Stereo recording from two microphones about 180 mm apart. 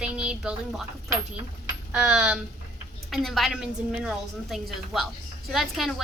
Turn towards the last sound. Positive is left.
turn(degrees=0)  # may be behind; listen again after turning